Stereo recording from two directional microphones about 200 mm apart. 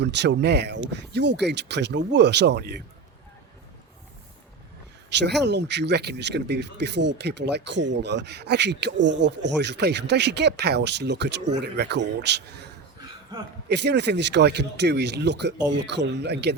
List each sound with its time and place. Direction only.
0.0 s speech: 60° right (ahead or behind)
5.0 s speech: 55° right (ahead or behind)
13.7 s speech: 60° right (ahead or behind)